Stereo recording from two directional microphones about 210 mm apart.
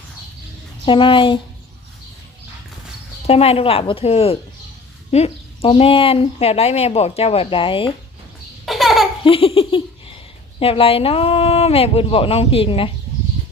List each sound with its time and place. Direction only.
0.9 s speech: 25° left (ahead or behind)
3.2 s speech: 30° left (ahead or behind)
8.6 s laughter: centre (ahead or behind)
9.2 s laughter: 25° left (ahead or behind)
10.6 s speech: 25° left (ahead or behind)